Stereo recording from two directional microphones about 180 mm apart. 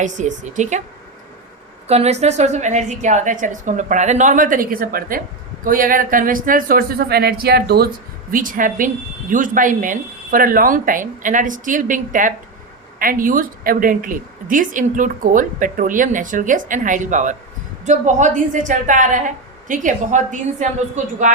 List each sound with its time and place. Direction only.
0.0 s speech: 45° right (ahead or behind)
1.9 s speech: 35° right (ahead or behind); by 7.9 s 60° right (ahead or behind)
8.3 s speech: 50° right (ahead or behind)